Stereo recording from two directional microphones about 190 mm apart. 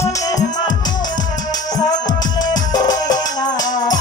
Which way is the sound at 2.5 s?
20° left (ahead or behind).